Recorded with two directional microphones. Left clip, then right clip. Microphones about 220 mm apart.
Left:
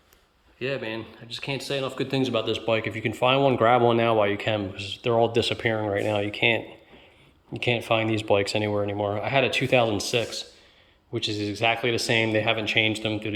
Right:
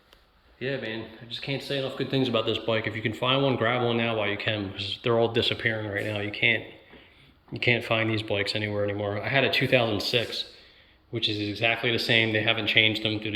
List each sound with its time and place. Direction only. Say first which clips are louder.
0.6 s speech: left 2 dB; 15° left (ahead or behind)
7.6 s speech: even; 10° left (ahead or behind)
11.1 s speech: even; 10° left (ahead or behind)